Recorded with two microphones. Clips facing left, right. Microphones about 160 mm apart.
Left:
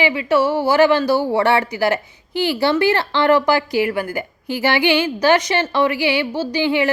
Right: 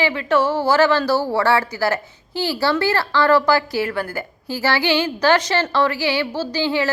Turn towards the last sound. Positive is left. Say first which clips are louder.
# left 3 dB
turn(degrees=15)  # may be behind; listen again after turning